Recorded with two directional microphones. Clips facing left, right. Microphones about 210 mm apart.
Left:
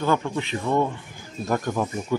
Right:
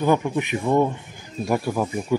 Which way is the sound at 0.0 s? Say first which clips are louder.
Right 3 dB; 15° right (ahead or behind).